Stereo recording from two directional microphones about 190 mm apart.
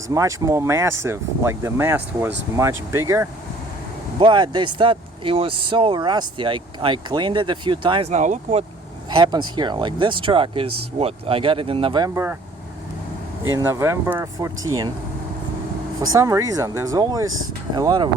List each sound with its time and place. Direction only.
0.1 s speech: 15° right (ahead or behind); by 8.6 s 35° right (ahead or behind)
9.0 s vehicle: 25° right (ahead or behind)
9.6 s speech: 25° right (ahead or behind)
12.1 s speech: 10° right (ahead or behind)
13.5 s speech: 15° right (ahead or behind)
16.1 s speech: 15° right (ahead or behind)